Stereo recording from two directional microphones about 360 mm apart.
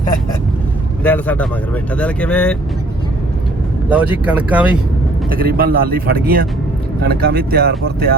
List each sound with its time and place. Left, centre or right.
1.0 s speech: centre
3.8 s speech: centre
5.3 s speech: right